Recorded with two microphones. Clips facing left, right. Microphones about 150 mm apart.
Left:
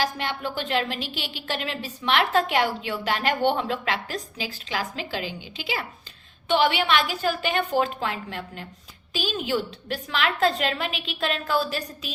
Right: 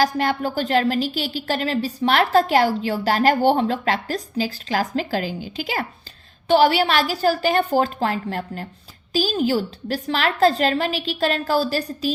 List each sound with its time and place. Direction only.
0.0 s a woman's voice: 40° right (ahead or behind)